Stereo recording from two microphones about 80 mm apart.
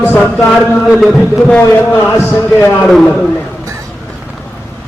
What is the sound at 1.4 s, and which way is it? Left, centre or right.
A man's voice, centre.